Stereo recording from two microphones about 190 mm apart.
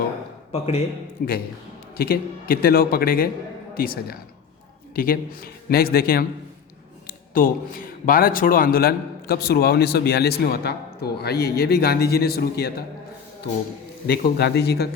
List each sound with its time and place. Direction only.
0.5 s a man's voice: 35° left (ahead or behind)
1.2 s a man's voice: 50° left (ahead or behind)
14.1 s a man's voice: 60° left (ahead or behind)